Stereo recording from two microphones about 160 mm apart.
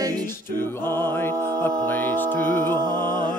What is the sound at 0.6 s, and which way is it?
Speech, 15° left (ahead or behind).